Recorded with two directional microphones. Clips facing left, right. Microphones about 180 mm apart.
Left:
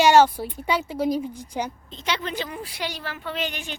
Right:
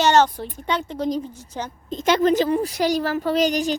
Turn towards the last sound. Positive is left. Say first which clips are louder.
# right 11 dB
turn(degrees=-40)  # may be behind; listen again after turning